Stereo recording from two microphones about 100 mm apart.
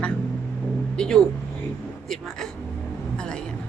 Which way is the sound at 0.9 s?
10° left (ahead or behind).